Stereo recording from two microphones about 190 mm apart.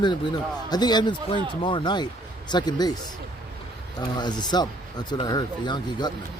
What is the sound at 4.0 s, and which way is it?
Speech, 20° left (ahead or behind).